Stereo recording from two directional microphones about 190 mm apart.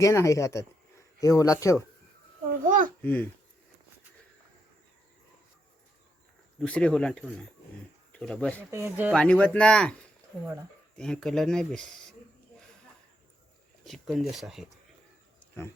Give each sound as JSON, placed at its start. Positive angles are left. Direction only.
{"t": 0.0, "sound": "speech", "side_deg": 15}
{"t": 2.5, "sound": "a child's voice", "side_deg": -45}
{"t": 3.0, "sound": "speech", "side_deg": 10}
{"t": 6.6, "sound": "speech", "side_deg": 5}
{"t": 8.7, "sound": "speech", "side_deg": -10}
{"t": 9.1, "sound": "speech", "side_deg": 5}
{"t": 10.9, "sound": "speech", "side_deg": 5}
{"t": 13.8, "sound": "speech", "side_deg": 0}